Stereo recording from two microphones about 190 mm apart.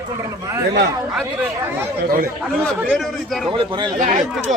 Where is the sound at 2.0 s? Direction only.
50° right (ahead or behind).